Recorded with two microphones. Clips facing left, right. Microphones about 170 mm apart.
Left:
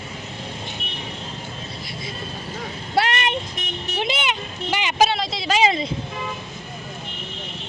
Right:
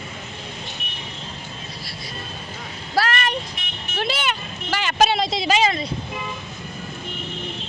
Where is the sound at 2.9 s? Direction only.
20° left (ahead or behind).